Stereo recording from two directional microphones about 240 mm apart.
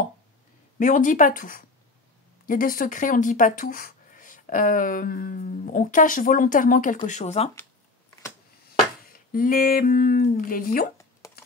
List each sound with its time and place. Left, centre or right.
0.7 s speech: left
9.3 s speech: left
11.2 s computer keyboard: centre